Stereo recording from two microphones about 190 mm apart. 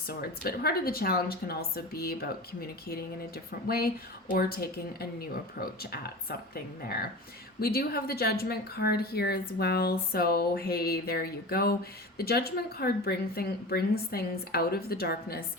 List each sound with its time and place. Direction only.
0.1 s speech: 55° left (ahead or behind)